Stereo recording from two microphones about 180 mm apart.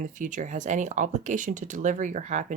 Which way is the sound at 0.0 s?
45° right (ahead or behind).